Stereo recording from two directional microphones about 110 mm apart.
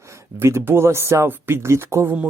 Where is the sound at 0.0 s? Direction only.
25° right (ahead or behind).